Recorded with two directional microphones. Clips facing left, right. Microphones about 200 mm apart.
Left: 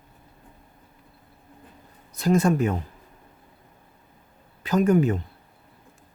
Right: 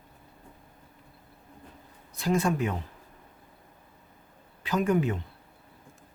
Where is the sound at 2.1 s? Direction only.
40° left (ahead or behind).